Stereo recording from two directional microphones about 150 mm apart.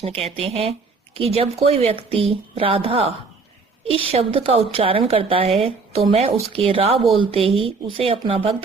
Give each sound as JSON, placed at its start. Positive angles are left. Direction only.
{"t": 0.4, "sound": "a woman's voice", "side_deg": -40}